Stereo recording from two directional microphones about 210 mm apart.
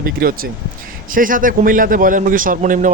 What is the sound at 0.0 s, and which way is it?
A man's voice, 45° right (ahead or behind).